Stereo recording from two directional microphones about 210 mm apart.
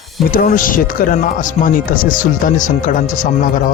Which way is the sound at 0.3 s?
40° left (ahead or behind).